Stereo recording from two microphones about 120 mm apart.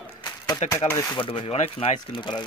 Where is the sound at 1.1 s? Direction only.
50° left (ahead or behind).